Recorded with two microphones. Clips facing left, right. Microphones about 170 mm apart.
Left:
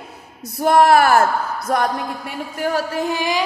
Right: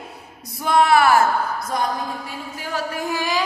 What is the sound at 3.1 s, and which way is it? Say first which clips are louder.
Music: even; 15° left (ahead or behind).